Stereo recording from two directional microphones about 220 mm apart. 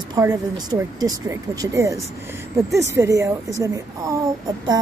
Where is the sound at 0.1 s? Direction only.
15° right (ahead or behind).